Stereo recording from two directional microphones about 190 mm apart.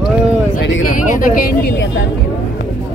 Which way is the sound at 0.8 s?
45° left (ahead or behind).